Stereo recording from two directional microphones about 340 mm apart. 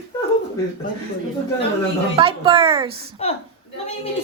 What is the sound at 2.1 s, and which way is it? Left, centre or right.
Speech, centre.